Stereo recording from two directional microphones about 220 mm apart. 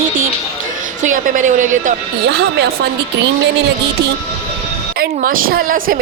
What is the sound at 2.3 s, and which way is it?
Speech, 50° right (ahead or behind).